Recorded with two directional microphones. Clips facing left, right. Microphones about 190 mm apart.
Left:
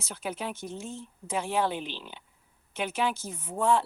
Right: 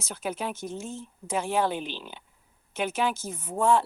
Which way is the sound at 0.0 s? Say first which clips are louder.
Right 3 dB; 45° right (ahead or behind).